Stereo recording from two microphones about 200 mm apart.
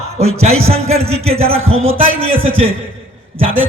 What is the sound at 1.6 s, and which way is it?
Speech, 90° right.